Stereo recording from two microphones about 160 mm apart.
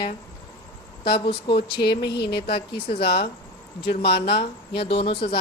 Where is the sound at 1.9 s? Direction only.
90° left.